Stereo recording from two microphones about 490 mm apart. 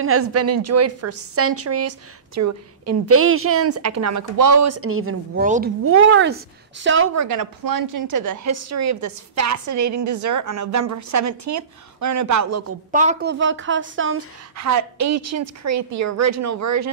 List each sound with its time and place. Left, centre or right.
0.0 s a woman's voice: right
7.2 s a woman's voice: right
12.9 s a woman's voice: centre; by 16.9 s right